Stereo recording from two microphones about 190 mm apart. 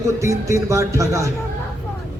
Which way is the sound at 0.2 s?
15° right (ahead or behind).